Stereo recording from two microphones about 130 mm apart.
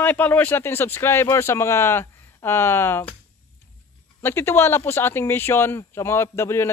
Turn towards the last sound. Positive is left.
turn(degrees=20)  # may be behind; listen again after turning